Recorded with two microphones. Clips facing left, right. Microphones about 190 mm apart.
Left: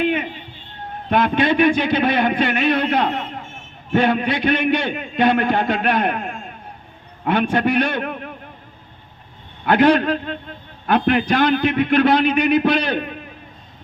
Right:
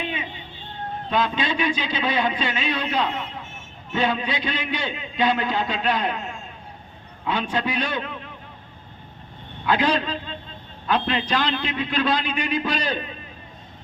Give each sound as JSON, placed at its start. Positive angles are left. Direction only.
{"t": 0.0, "sound": "a sound", "side_deg": 60}
{"t": 1.1, "sound": "a man's voice", "side_deg": 60}
{"t": 9.6, "sound": "a man's voice", "side_deg": 60}